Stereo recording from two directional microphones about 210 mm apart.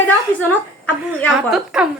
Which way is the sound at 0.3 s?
10° left (ahead or behind).